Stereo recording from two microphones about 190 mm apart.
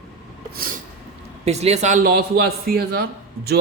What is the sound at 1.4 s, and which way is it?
A man's voice, 35° right (ahead or behind).